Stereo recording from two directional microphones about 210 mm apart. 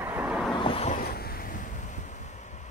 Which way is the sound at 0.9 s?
45° left (ahead or behind).